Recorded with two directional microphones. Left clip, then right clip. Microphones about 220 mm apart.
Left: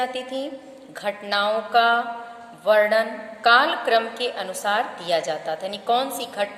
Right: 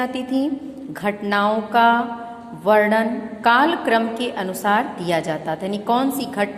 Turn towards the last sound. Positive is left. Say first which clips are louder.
# right 4 dB
turn(degrees=-10)  # may be behind; listen again after turning